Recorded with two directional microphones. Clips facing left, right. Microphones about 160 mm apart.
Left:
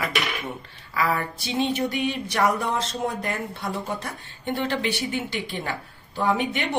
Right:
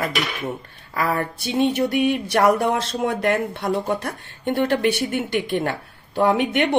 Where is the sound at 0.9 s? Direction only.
55° right (ahead or behind).